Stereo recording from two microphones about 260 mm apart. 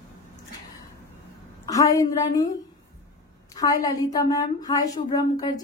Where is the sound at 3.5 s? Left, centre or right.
Centre.